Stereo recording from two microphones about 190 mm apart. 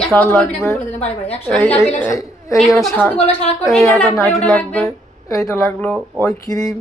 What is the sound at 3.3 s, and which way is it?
Speech, 30° left (ahead or behind).